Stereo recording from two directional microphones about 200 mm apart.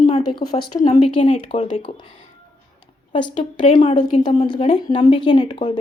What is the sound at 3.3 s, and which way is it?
A woman's voice, 25° left (ahead or behind).